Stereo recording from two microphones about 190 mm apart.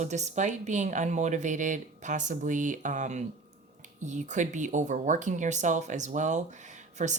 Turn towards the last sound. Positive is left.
turn(degrees=-40)  # may be behind; listen again after turning